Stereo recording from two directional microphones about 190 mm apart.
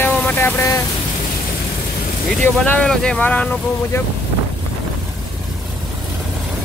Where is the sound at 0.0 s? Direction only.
10° left (ahead or behind).